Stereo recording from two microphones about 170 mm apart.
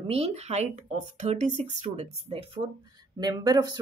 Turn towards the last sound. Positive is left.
turn(degrees=-25)  # may be behind; listen again after turning